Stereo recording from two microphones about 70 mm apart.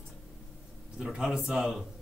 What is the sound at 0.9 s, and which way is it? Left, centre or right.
Speech, centre.